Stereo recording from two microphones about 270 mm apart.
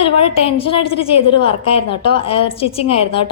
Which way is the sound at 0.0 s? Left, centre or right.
Left.